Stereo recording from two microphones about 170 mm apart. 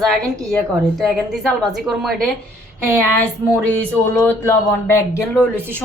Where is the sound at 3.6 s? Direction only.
10° left (ahead or behind).